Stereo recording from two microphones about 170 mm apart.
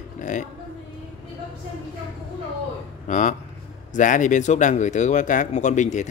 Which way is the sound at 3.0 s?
45° left (ahead or behind).